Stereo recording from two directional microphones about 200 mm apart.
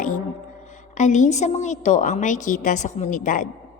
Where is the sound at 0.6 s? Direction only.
35° left (ahead or behind).